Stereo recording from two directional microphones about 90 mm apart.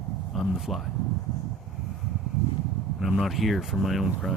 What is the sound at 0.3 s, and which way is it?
Speech, 5° right (ahead or behind).